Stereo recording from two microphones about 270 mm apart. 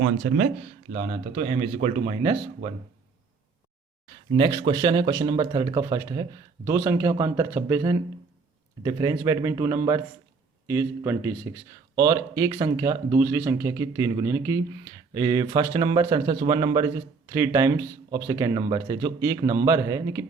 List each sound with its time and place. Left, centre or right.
0.9 s speech: right
4.3 s speech: centre